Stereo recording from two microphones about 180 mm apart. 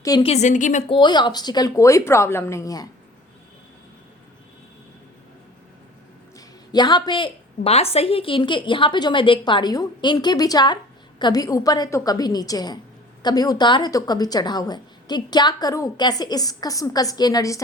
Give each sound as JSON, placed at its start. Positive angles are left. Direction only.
{"t": 0.0, "sound": "a woman's voice", "side_deg": 20}
{"t": 0.3, "sound": "a woman's voice", "side_deg": 40}
{"t": 0.9, "sound": "a woman's voice", "side_deg": 25}
{"t": 6.7, "sound": "a woman's voice", "side_deg": 25}